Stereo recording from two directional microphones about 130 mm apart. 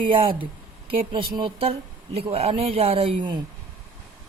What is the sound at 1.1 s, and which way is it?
A man's voice, 40° right (ahead or behind).